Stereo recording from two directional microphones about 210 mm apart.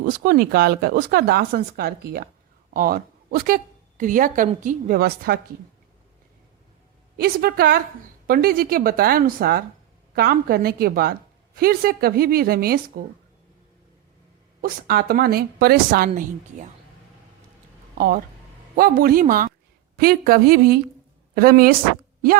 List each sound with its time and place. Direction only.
0.0 s a woman's voice: 40° right (ahead or behind)
7.2 s a woman's voice: 45° right (ahead or behind)
14.6 s a woman's voice: 45° right (ahead or behind)
17.9 s a woman's voice: 45° right (ahead or behind)